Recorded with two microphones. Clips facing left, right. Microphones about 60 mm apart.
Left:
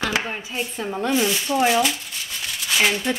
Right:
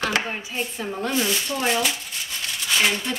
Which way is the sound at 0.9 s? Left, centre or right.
Centre.